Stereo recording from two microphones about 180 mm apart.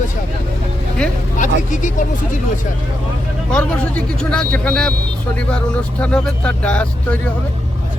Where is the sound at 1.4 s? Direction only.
45° left (ahead or behind).